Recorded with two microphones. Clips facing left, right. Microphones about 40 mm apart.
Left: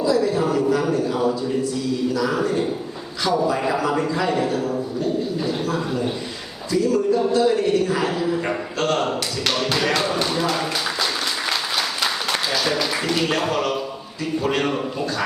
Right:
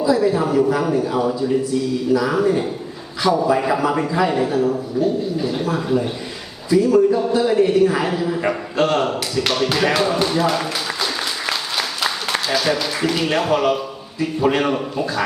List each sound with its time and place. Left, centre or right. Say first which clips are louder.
0.0 s a man's voice: right 2 dB; centre